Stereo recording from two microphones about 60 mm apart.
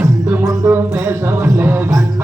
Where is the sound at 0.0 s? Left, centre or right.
Right.